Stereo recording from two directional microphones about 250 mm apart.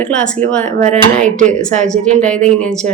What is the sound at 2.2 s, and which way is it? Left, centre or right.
Speech, right.